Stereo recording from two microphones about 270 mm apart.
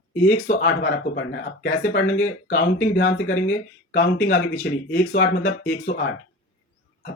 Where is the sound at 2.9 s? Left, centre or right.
Left.